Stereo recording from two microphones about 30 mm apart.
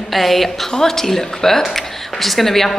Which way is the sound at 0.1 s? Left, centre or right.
Centre.